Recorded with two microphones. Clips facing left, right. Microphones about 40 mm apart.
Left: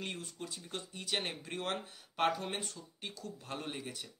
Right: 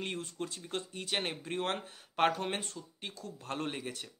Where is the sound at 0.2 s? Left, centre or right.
Right.